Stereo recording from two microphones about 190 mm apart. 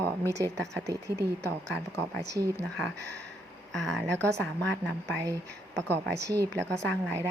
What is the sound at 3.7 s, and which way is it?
Speech, centre (ahead or behind).